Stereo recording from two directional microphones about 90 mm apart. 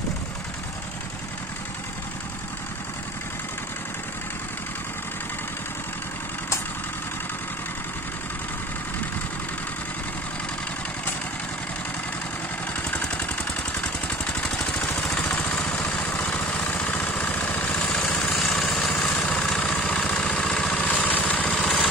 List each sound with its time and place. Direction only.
12.7 s vehicle: 15° left (ahead or behind)
17.7 s vehicle: 10° left (ahead or behind)
21.5 s vehicle: 5° left (ahead or behind)